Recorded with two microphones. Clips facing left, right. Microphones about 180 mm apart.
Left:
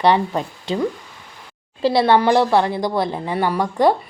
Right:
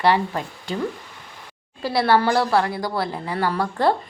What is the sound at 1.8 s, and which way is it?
A woman's voice, 20° left (ahead or behind).